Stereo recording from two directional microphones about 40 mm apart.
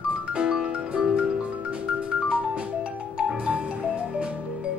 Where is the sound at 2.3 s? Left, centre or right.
Right.